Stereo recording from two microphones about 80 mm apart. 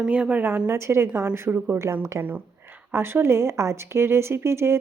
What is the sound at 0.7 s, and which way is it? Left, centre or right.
A woman's voice, right.